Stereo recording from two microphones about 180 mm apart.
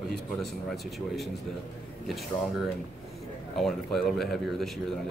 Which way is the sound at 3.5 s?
Centre (ahead or behind).